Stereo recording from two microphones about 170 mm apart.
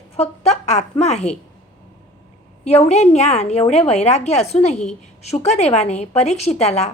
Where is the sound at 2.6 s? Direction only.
40° left (ahead or behind).